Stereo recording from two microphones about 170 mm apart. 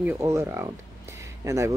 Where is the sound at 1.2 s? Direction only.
15° right (ahead or behind).